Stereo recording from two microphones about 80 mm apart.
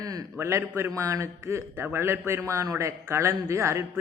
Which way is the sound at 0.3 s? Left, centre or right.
Right.